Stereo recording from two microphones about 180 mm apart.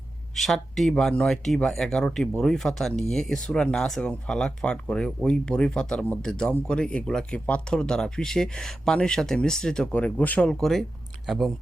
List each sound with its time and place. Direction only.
0.3 s speech: centre (ahead or behind)